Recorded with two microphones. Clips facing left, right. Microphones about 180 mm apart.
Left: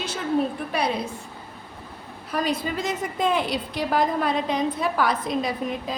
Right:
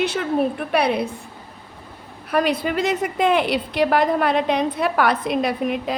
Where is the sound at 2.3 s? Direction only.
65° right (ahead or behind).